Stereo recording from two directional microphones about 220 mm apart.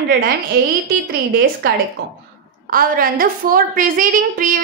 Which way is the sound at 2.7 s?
40° right (ahead or behind).